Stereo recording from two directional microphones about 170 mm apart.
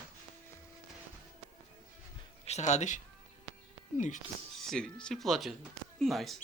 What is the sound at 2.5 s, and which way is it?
Speech, 40° left (ahead or behind).